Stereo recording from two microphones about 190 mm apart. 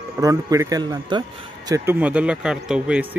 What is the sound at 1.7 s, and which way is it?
Speech, 10° right (ahead or behind).